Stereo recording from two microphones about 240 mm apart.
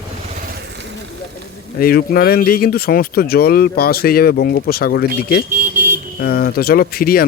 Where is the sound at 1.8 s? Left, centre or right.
Left.